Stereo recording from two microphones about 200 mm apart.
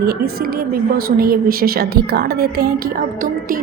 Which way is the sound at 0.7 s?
45° right (ahead or behind).